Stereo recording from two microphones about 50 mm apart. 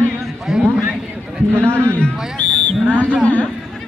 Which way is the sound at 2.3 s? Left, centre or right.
Left.